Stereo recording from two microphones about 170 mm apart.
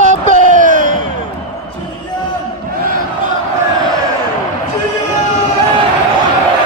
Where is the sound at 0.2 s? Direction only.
50° right (ahead or behind).